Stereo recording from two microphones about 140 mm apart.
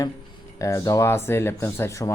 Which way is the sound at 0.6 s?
20° left (ahead or behind).